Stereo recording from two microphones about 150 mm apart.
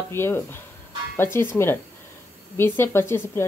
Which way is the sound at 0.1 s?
15° left (ahead or behind).